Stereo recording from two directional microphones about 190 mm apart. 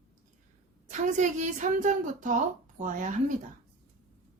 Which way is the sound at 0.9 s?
40° right (ahead or behind).